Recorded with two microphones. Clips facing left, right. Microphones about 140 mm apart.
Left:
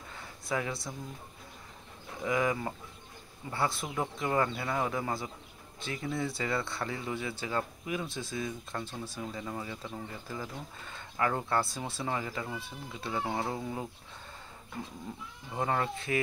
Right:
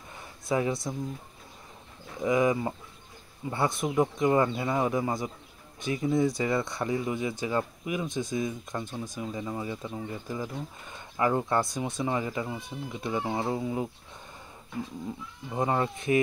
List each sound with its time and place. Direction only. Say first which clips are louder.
0.5 s speech: right 6 dB; 20° right (ahead or behind)
2.2 s speech: right 5 dB; 20° right (ahead or behind)
15.5 s speech: right 4 dB; 20° right (ahead or behind)